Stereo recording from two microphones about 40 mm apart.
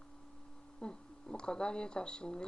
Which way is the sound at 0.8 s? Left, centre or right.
Left.